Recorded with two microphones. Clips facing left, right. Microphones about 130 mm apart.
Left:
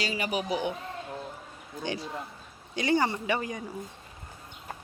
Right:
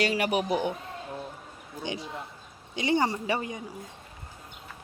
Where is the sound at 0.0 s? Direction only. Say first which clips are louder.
Right 5 dB; 60° right (ahead or behind).